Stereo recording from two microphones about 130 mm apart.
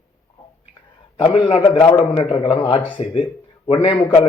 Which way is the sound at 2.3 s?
45° left (ahead or behind).